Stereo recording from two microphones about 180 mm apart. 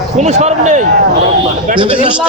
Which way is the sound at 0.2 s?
40° right (ahead or behind).